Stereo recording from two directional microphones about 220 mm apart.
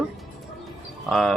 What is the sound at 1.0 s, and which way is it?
Speech, centre (ahead or behind).